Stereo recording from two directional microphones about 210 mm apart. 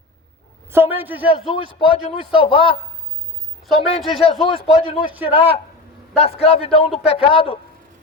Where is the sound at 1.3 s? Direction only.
25° left (ahead or behind).